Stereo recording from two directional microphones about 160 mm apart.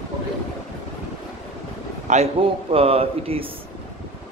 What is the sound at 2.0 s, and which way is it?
Speech, 45° right (ahead or behind).